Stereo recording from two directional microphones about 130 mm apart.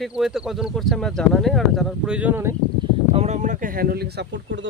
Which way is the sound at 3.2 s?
65° right (ahead or behind).